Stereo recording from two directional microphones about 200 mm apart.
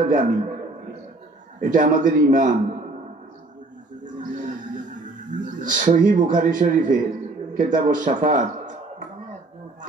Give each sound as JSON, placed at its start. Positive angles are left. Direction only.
{"t": 0.0, "sound": "a man's voice", "side_deg": -40}
{"t": 1.6, "sound": "a man's voice", "side_deg": -40}
{"t": 4.0, "sound": "music", "side_deg": -40}
{"t": 7.5, "sound": "a man's voice", "side_deg": -40}